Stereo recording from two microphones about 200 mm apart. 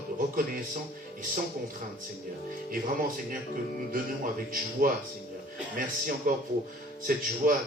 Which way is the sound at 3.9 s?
45° right (ahead or behind).